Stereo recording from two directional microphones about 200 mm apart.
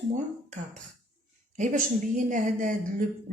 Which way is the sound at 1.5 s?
40° right (ahead or behind).